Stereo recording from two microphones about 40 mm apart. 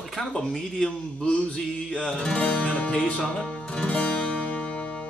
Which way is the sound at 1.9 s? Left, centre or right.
Centre.